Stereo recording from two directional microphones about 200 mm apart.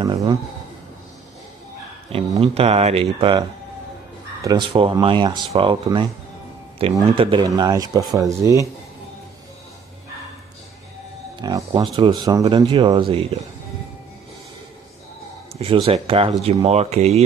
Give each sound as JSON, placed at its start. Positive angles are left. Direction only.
{"t": 0.0, "sound": "speech", "side_deg": -25}
{"t": 2.1, "sound": "speech", "side_deg": -30}
{"t": 11.4, "sound": "speech", "side_deg": -20}
{"t": 15.6, "sound": "speech", "side_deg": -30}